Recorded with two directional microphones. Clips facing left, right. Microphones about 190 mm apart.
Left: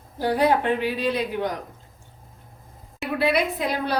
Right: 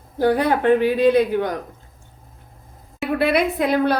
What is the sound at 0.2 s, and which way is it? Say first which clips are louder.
A woman's voice: right 3 dB; 55° right (ahead or behind).